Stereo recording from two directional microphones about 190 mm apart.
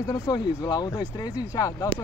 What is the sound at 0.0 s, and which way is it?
Speech, 20° left (ahead or behind).